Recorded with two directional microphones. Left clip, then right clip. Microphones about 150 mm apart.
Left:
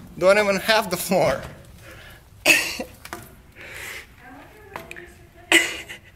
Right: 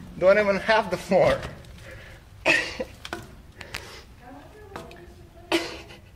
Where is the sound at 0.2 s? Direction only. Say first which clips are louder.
Left 2 dB; 55° left (ahead or behind).